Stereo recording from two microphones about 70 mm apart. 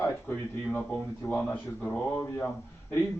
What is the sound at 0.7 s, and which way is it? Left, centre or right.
A man's voice, centre.